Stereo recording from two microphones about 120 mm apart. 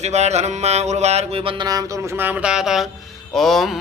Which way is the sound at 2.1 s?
15° right (ahead or behind).